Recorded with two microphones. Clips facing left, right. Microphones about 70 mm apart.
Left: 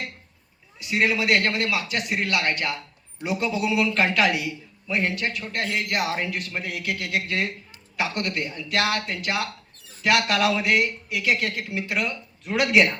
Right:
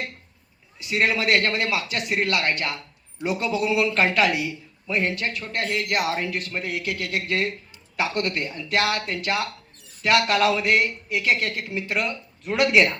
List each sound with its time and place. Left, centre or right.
0.9 s a man's voice: right
5.7 s speech: left
6.1 s a man's voice: right